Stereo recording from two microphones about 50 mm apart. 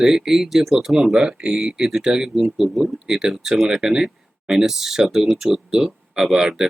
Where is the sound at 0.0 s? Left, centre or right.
Centre.